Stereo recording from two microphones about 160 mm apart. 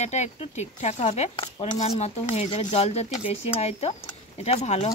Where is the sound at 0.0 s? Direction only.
45° left (ahead or behind).